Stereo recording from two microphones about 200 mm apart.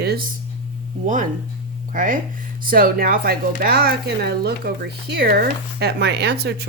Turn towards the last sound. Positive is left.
turn(degrees=-55)  # may be behind; listen again after turning